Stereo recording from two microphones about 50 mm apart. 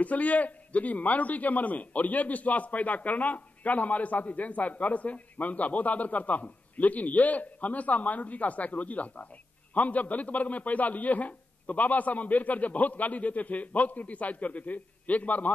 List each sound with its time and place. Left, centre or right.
0.0 s a man's voice: left